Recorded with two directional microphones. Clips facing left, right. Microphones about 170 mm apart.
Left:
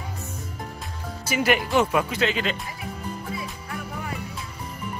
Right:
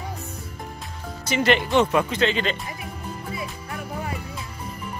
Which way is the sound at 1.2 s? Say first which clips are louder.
Right 2 dB; 10° left (ahead or behind).